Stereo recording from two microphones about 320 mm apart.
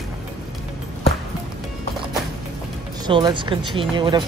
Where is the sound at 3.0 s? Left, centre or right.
Centre.